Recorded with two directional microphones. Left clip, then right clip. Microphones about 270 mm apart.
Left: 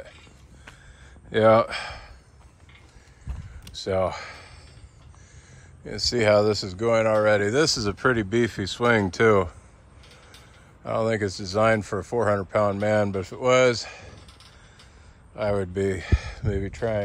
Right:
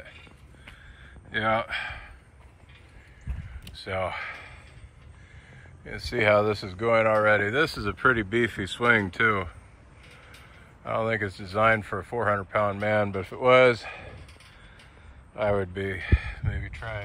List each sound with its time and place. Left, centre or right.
1.4 s speech: left
3.7 s speech: left
5.9 s speech: centre
10.8 s speech: centre
15.3 s speech: centre